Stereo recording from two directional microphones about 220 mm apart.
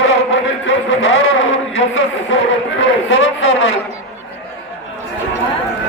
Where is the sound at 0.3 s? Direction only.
60° left (ahead or behind).